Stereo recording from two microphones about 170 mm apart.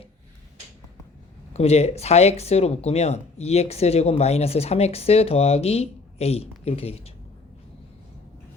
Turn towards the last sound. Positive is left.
turn(degrees=35)  # may be behind; listen again after turning